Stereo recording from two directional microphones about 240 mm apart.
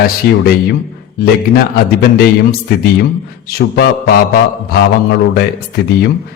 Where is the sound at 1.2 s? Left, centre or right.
Left.